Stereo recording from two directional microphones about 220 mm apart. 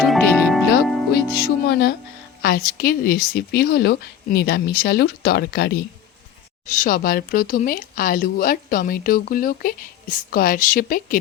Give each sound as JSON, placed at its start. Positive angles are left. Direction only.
{"t": 0.0, "sound": "music", "side_deg": 0}
{"t": 1.1, "sound": "music", "side_deg": 45}
{"t": 2.4, "sound": "a woman's voice", "side_deg": 40}